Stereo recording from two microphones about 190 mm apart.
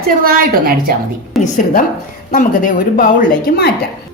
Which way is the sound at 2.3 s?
45° left (ahead or behind).